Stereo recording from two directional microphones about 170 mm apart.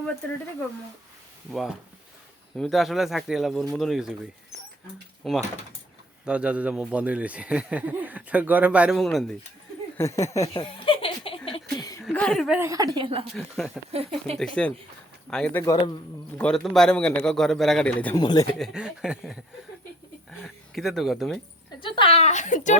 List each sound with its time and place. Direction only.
0.2 s speech: 10° left (ahead or behind)
2.6 s a man's voice: centre (ahead or behind)
10.0 s speech: 15° left (ahead or behind)
10.5 s snicker: 30° left (ahead or behind)
12.1 s speech: 5° left (ahead or behind)
12.5 s a woman's voice: 20° right (ahead or behind); by 14.3 s 35° right (ahead or behind)
14.3 s a man's voice: 5° left (ahead or behind)
18.2 s speech: 25° left (ahead or behind)
18.5 s a man's voice: centre (ahead or behind)
21.8 s speech: 30° left (ahead or behind); by 22.8 s 45° left (ahead or behind)